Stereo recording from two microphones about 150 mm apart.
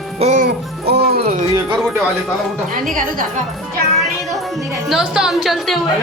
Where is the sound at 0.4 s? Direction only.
90° right.